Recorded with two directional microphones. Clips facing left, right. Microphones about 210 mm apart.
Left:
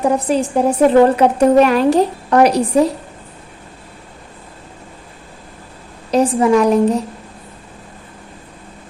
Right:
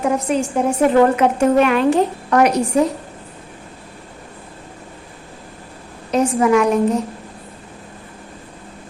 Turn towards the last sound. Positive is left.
turn(degrees=35)  # may be behind; listen again after turning